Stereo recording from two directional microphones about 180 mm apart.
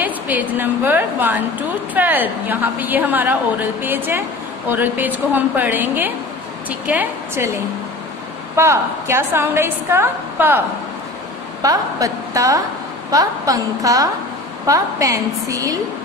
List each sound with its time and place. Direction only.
0.0 s a woman's voice: 10° right (ahead or behind)
11.6 s a woman's voice: 20° right (ahead or behind)